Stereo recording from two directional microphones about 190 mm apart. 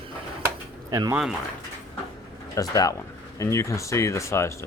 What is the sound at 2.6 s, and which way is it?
Speech, 20° left (ahead or behind).